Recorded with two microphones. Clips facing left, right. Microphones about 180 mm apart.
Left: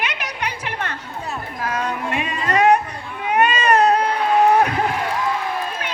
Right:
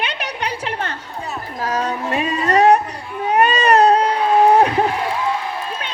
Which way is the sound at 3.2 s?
35° right (ahead or behind).